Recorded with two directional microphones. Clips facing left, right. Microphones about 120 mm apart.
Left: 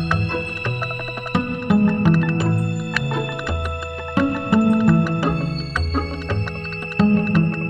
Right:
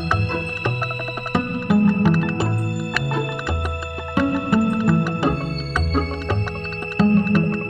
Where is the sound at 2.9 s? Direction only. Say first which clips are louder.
Right 1 dB; centre (ahead or behind).